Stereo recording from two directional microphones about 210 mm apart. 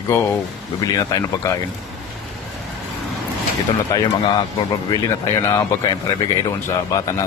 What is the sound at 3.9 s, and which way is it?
Speech, 15° left (ahead or behind).